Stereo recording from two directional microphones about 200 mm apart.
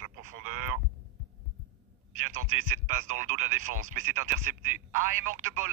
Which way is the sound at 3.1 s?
40° right (ahead or behind).